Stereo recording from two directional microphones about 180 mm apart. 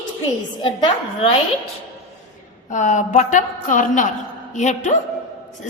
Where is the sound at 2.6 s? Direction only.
40° left (ahead or behind).